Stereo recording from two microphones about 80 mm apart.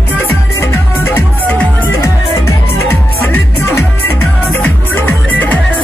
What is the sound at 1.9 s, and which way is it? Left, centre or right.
Music, left.